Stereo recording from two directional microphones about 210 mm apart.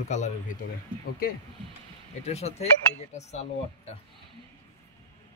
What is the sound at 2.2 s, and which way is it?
Speech, 30° left (ahead or behind).